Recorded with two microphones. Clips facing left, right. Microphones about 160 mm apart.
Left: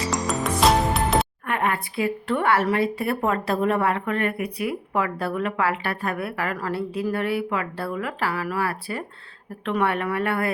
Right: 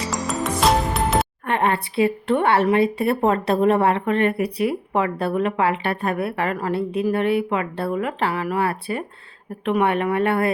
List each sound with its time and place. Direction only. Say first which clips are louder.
0.1 s music: right 1 dB; centre (ahead or behind)
1.5 s a woman's voice: right 4 dB; 30° right (ahead or behind)